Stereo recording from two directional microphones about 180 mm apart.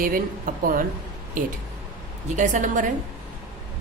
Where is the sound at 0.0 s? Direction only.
50° right (ahead or behind).